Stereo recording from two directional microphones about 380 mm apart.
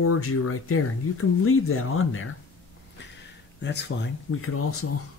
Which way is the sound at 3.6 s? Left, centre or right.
Left.